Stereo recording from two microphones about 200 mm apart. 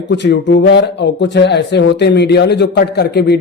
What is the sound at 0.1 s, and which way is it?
Speech, 60° left (ahead or behind).